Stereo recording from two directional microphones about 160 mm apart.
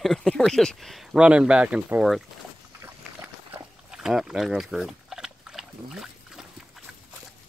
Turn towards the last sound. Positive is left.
turn(degrees=-5)  # may be behind; listen again after turning